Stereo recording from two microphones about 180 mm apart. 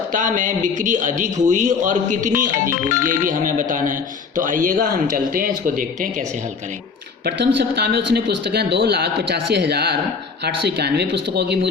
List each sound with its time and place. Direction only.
0.1 s a man's voice: 45° right (ahead or behind)
7.3 s speech: 65° right (ahead or behind)